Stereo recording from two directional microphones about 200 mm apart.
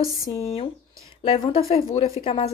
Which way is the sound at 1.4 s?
30° left (ahead or behind).